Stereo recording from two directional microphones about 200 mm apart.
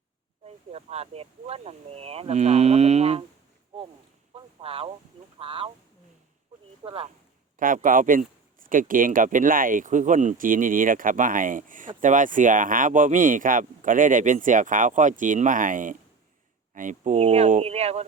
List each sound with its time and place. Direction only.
0.4 s speech: 30° right (ahead or behind)
4.6 s speech: 30° right (ahead or behind)
6.8 s speech: 30° right (ahead or behind)
7.6 s speech: 45° right (ahead or behind)